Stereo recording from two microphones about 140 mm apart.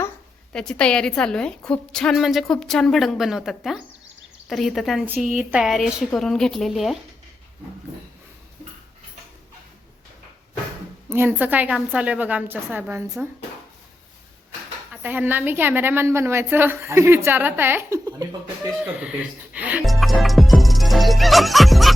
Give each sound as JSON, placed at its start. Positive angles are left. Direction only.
{"t": 0.5, "sound": "a woman's voice", "side_deg": 5}
{"t": 5.0, "sound": "a woman's voice", "side_deg": -15}
{"t": 11.1, "sound": "a woman's voice", "side_deg": -15}
{"t": 15.0, "sound": "a woman's voice", "side_deg": -15}
{"t": 18.8, "sound": "a woman's voice", "side_deg": -5}
{"t": 19.8, "sound": "music", "side_deg": 0}